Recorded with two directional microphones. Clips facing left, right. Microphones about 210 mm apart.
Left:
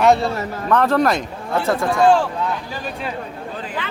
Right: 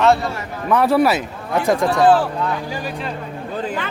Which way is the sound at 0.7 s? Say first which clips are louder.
Right 1 dB; 10° right (ahead or behind).